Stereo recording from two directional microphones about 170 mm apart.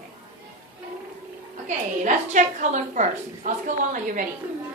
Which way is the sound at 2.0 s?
45° right (ahead or behind).